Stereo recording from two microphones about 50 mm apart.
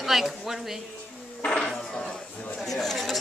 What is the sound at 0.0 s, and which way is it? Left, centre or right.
Speech, centre.